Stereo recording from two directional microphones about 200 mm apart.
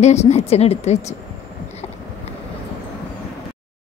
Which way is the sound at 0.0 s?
35° left (ahead or behind).